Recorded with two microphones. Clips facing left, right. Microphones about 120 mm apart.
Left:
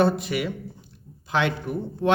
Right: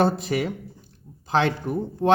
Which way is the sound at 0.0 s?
40° right (ahead or behind).